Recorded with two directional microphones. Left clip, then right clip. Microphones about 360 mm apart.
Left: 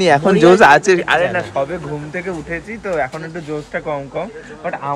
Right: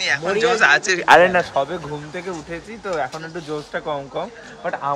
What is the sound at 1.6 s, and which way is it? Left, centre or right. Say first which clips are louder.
Speech: left 2 dB; centre.